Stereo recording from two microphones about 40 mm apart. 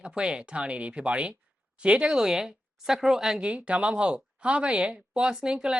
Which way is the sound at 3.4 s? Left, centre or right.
Right.